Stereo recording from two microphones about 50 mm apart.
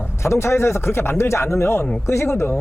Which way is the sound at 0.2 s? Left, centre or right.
Left.